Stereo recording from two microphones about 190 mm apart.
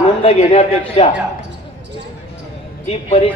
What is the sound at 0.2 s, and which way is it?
Speech, 30° left (ahead or behind).